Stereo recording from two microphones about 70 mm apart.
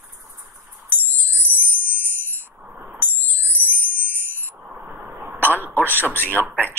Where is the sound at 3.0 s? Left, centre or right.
Right.